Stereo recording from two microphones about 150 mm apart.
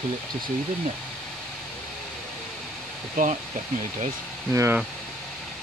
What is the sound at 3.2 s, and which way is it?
Speech, 60° right (ahead or behind).